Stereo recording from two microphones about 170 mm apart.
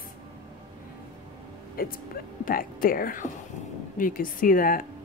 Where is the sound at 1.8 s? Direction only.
60° left (ahead or behind).